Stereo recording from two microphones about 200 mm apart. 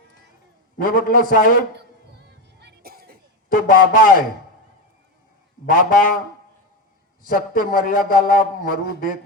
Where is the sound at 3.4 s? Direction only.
45° left (ahead or behind).